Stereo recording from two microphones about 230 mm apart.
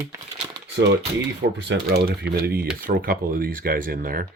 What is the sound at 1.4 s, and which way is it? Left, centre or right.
Speech, right.